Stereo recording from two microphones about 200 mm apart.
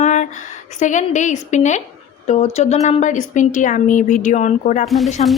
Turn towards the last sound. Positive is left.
turn(degrees=0)  # may be behind; listen again after turning